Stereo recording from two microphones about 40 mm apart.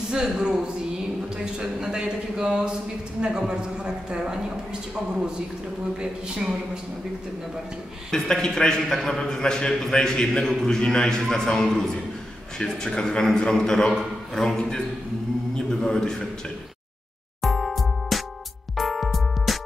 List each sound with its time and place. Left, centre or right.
0.1 s a woman's voice: centre
5.9 s a woman's voice: right
8.1 s a man's voice: centre
15.5 s a man's voice: centre
17.4 s music: centre